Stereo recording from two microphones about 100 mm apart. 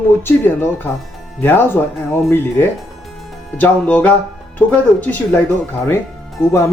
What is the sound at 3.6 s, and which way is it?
Music, 15° left (ahead or behind).